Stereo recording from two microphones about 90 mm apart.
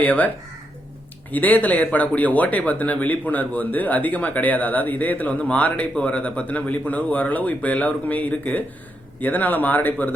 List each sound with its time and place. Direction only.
0.0 s speech: 15° left (ahead or behind)
1.3 s speech: 20° left (ahead or behind)